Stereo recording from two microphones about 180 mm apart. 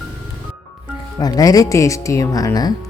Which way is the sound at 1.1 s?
20° left (ahead or behind).